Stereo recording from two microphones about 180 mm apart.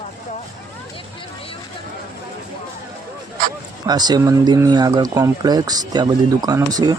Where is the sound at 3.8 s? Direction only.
25° right (ahead or behind).